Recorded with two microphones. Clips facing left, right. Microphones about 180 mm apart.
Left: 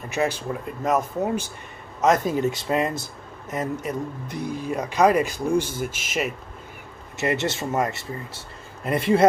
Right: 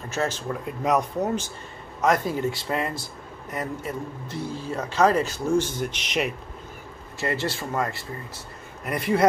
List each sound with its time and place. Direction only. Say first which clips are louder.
0.1 s speech: left 3 dB; 15° left (ahead or behind)
0.5 s speech: even; centre (ahead or behind)
2.0 s speech: left 3 dB; 20° left (ahead or behind); by 6.3 s 5° left (ahead or behind)
7.2 s speech: left 3 dB; 20° left (ahead or behind)